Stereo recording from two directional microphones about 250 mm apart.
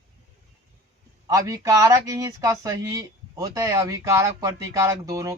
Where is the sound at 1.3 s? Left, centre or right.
Centre.